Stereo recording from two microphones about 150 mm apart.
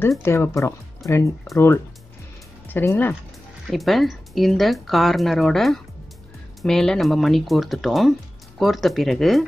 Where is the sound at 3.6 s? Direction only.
Centre (ahead or behind).